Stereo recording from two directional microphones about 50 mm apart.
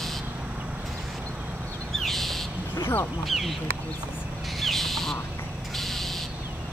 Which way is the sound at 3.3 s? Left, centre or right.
Centre.